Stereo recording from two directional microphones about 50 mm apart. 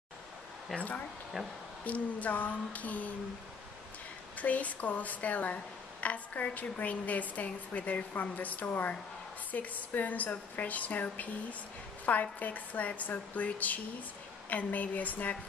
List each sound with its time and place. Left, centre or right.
0.7 s a woman's voice: left
4.4 s a woman's voice: left